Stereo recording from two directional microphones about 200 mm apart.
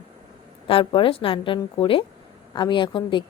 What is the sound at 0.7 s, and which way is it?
Speech, 25° left (ahead or behind).